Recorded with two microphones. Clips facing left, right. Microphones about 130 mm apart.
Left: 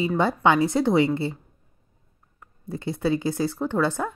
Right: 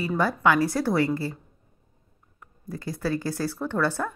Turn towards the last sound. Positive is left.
turn(degrees=20)  # may be behind; listen again after turning